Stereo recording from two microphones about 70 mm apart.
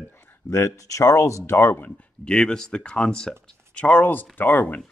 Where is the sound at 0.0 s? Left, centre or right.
Left.